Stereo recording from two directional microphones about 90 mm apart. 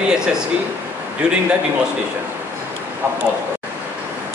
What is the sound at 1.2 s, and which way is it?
Speech, 10° right (ahead or behind).